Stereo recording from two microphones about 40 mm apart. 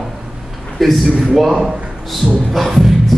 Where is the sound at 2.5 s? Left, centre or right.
Centre.